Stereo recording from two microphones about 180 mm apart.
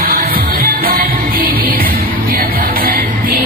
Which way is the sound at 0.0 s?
55° right (ahead or behind).